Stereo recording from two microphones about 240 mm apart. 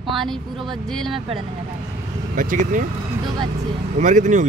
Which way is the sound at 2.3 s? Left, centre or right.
Right.